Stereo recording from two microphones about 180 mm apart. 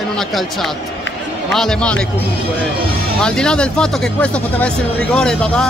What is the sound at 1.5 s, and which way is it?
Speech, 5° left (ahead or behind).